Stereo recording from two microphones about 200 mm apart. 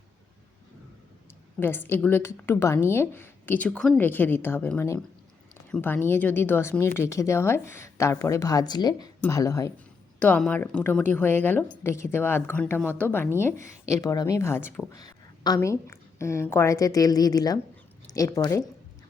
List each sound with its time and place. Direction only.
1.5 s a woman's voice: 10° left (ahead or behind)